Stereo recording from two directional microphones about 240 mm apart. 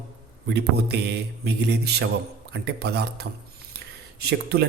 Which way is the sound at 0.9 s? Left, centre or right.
Right.